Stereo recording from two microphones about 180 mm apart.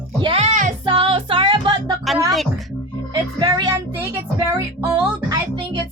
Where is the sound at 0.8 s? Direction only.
30° right (ahead or behind).